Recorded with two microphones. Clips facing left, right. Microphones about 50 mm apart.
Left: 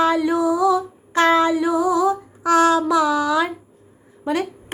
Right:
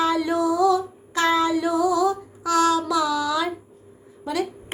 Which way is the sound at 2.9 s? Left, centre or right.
Left.